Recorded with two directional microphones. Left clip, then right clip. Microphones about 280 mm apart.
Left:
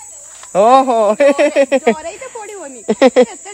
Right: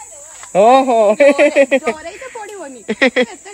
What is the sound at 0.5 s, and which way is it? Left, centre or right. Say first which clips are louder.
Speech: even; centre.